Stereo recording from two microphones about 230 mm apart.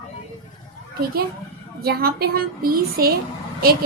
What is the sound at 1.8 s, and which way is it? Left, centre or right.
A woman's voice, right.